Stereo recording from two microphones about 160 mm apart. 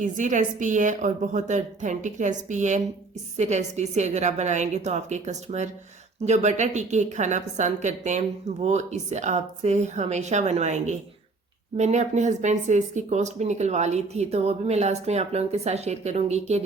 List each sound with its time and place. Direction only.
0.0 s speech: 50° right (ahead or behind)